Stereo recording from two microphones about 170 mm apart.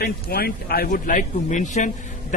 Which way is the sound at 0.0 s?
65° left (ahead or behind).